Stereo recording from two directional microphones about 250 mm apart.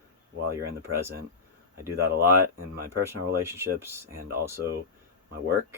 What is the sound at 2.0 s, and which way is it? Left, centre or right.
Speech, centre.